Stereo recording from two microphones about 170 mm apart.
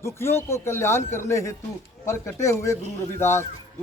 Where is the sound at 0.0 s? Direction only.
15° left (ahead or behind).